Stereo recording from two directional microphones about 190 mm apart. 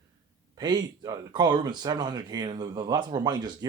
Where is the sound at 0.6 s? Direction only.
20° right (ahead or behind).